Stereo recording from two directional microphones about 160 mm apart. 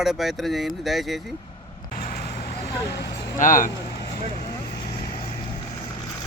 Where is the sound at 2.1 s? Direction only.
70° left (ahead or behind); by 3.4 s 90° left.